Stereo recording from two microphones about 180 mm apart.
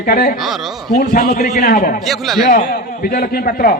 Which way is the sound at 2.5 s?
50° left (ahead or behind).